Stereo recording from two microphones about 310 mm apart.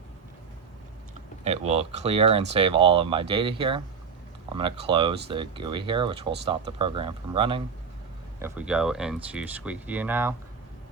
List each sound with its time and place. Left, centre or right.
1.5 s speech: centre
8.4 s speech: centre